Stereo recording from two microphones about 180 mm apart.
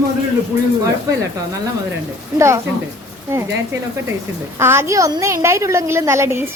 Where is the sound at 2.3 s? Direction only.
15° right (ahead or behind).